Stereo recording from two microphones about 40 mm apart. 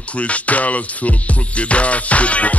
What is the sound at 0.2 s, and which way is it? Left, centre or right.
Music, left.